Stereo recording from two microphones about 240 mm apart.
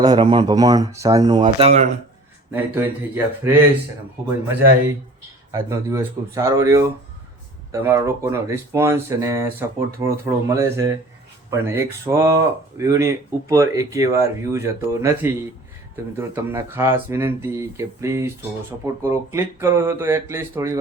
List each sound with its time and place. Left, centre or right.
0.0 s speech: centre
2.5 s speech: centre
5.5 s speech: centre